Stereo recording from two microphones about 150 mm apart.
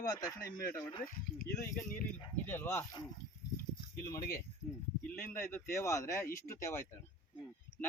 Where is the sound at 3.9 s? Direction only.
20° left (ahead or behind).